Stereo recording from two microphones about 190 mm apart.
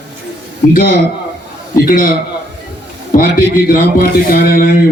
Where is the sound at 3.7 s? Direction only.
50° left (ahead or behind).